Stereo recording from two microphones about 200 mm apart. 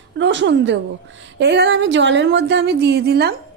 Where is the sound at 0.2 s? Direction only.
65° right (ahead or behind).